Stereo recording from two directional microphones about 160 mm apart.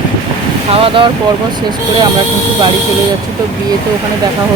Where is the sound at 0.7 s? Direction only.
35° right (ahead or behind).